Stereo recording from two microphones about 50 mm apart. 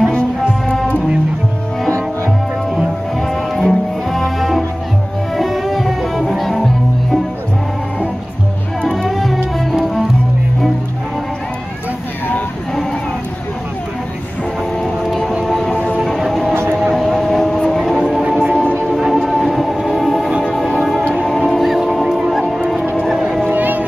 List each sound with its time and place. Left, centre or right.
3.2 s music: centre
8.8 s music: centre
15.4 s music: centre
16.9 s vehicle: centre
17.6 s music: centre
17.8 s music: centre
19.2 s train: centre
20.2 s music: centre
20.5 s music: centre
23.5 s foghorn: right